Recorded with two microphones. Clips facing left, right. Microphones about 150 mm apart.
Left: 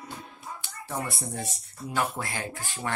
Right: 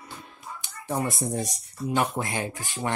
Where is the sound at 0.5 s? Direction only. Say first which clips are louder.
Right 6 dB; 20° right (ahead or behind).